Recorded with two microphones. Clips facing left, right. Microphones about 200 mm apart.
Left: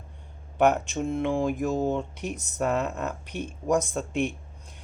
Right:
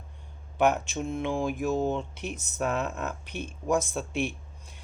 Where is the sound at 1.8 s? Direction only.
10° left (ahead or behind).